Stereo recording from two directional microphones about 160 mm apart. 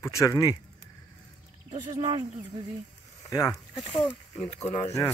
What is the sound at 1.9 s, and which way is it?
Speech, 30° right (ahead or behind).